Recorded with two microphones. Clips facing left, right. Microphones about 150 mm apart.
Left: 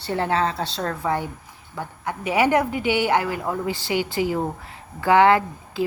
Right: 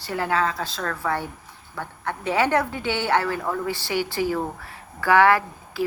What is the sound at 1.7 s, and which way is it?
A woman's voice, 15° left (ahead or behind).